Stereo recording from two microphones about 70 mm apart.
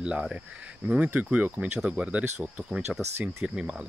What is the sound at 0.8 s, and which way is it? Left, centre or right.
Speech, right.